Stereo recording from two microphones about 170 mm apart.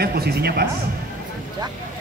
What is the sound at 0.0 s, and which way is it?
Speech, 70° right (ahead or behind).